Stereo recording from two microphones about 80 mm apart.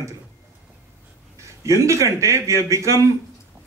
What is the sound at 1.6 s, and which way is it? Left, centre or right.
A man's voice, right.